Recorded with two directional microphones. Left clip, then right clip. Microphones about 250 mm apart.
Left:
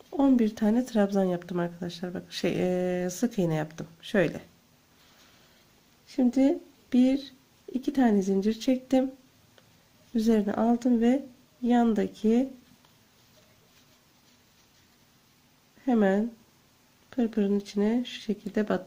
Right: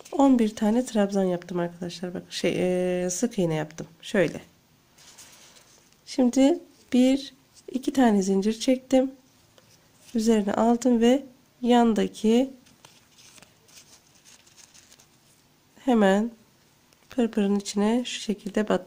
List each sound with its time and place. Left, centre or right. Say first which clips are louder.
0.1 s speech: right 4 dB; centre
6.0 s speech: right 4 dB; centre
10.1 s speech: right 3 dB; centre
15.8 s a woman's voice: right 4 dB; centre